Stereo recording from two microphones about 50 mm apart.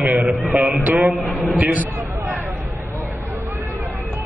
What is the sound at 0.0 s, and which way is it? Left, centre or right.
Music, centre.